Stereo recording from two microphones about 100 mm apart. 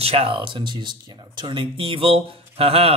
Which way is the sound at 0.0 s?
75° right (ahead or behind).